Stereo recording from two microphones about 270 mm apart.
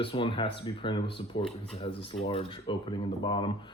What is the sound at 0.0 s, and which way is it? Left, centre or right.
Speech, centre.